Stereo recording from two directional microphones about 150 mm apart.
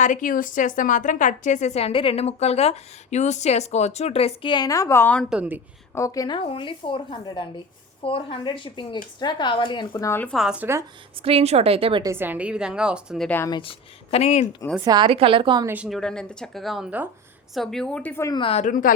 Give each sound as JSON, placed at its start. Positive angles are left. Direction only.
{"t": 0.0, "sound": "a woman's voice", "side_deg": 60}
{"t": 5.3, "sound": "a woman's voice", "side_deg": -10}
{"t": 5.9, "sound": "a woman's voice", "side_deg": 20}
{"t": 9.9, "sound": "speech", "side_deg": 20}
{"t": 10.2, "sound": "a woman's voice", "side_deg": 0}
{"t": 11.2, "sound": "a woman's voice", "side_deg": -40}
{"t": 12.0, "sound": "a woman's voice", "side_deg": -15}
{"t": 13.2, "sound": "speech", "side_deg": 10}
{"t": 13.5, "sound": "a woman's voice", "side_deg": 35}
{"t": 14.8, "sound": "a woman's voice", "side_deg": -35}
{"t": 15.6, "sound": "a woman's voice", "side_deg": -10}
{"t": 15.9, "sound": "speech", "side_deg": 5}
{"t": 18.3, "sound": "a woman's voice", "side_deg": 35}
{"t": 18.6, "sound": "a woman's voice", "side_deg": 65}